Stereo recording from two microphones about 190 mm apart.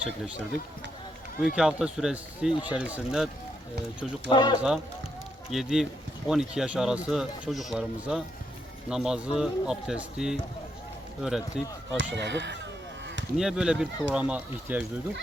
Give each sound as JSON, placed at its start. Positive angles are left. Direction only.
{"t": 0.0, "sound": "speech", "side_deg": -5}
{"t": 1.5, "sound": "speech", "side_deg": -5}
{"t": 4.3, "sound": "speech", "side_deg": 25}
{"t": 5.5, "sound": "speech", "side_deg": 0}
{"t": 11.9, "sound": "speech", "side_deg": -70}
{"t": 13.3, "sound": "speech", "side_deg": -5}